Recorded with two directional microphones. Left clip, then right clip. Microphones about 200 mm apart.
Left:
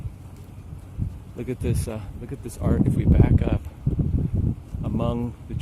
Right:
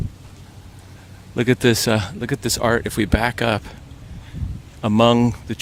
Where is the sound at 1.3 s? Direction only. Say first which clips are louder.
Right 14 dB; 40° right (ahead or behind).